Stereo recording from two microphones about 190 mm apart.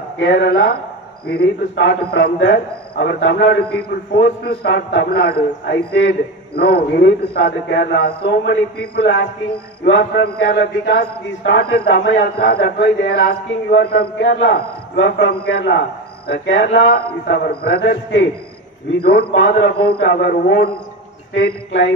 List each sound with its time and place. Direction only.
0.2 s a man's voice: 65° left (ahead or behind)
4.1 s a man's voice: 55° left (ahead or behind)